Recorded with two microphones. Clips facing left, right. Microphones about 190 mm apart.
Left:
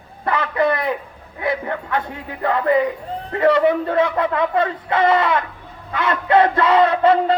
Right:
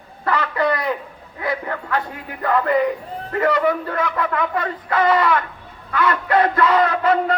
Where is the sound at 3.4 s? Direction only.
25° left (ahead or behind).